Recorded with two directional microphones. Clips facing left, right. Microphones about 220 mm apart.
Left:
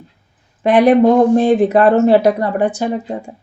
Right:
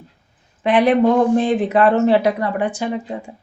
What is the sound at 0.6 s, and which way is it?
Speech, 40° left (ahead or behind).